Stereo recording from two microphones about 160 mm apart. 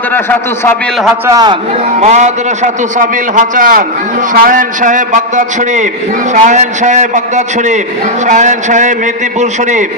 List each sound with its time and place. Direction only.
0.1 s a man's voice: 10° left (ahead or behind)
1.2 s a man's voice: 25° right (ahead or behind)
2.0 s a man's voice: 45° right (ahead or behind)